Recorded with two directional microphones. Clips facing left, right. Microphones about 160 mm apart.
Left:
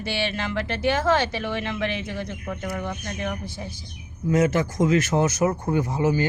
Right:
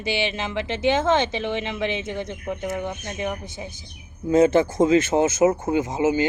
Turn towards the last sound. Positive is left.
turn(degrees=-20)  # may be behind; listen again after turning